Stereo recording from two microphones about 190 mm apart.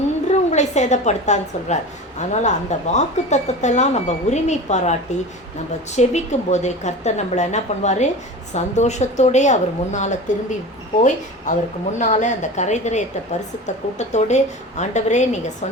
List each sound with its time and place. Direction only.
0.3 s a woman's voice: 35° left (ahead or behind)
14.1 s a woman's voice: 35° left (ahead or behind)